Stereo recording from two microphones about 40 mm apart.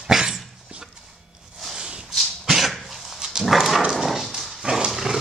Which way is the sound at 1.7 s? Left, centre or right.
Right.